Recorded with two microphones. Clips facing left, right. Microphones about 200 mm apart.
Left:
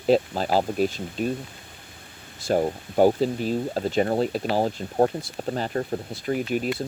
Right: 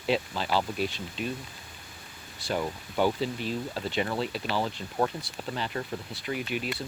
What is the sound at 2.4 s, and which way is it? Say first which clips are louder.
Speech: left 8 dB; 45° left (ahead or behind).